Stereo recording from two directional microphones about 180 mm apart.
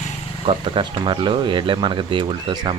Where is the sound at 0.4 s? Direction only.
30° right (ahead or behind).